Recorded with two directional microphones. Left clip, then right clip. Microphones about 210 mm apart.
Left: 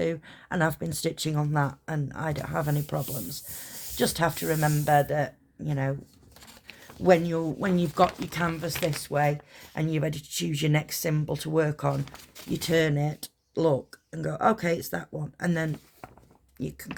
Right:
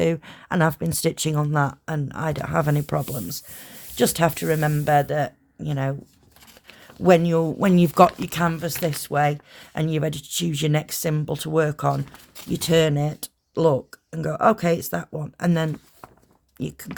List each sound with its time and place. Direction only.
0.0 s speech: 45° right (ahead or behind)
7.0 s speech: 50° right (ahead or behind)